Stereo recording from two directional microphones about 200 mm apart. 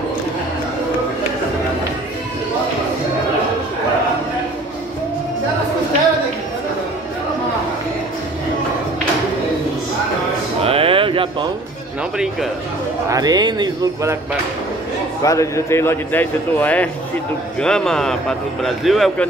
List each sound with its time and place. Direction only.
10.6 s a sound: 30° right (ahead or behind)
13.1 s speech: 20° right (ahead or behind)
15.2 s a man's voice: 15° left (ahead or behind)